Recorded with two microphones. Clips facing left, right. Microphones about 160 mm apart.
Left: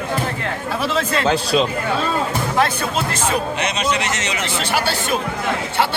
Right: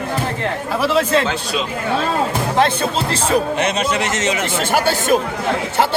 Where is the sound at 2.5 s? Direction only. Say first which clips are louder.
Right 3 dB; 25° right (ahead or behind).